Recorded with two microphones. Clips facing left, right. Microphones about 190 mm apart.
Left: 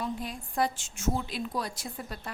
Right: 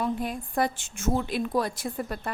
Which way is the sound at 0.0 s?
55° right (ahead or behind).